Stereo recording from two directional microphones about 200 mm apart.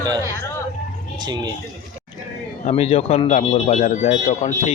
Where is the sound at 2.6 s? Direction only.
30° left (ahead or behind).